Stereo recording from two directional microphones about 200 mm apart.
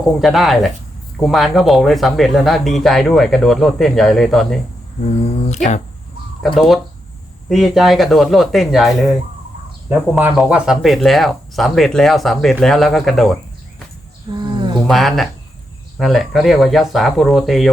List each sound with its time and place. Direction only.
0.2 s speech: centre (ahead or behind)
6.4 s speech: centre (ahead or behind)
9.9 s speech: 5° right (ahead or behind)
14.3 s insect: 25° right (ahead or behind)
14.8 s speech: centre (ahead or behind)